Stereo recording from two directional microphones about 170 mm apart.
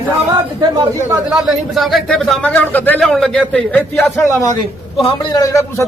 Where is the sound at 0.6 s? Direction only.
25° right (ahead or behind).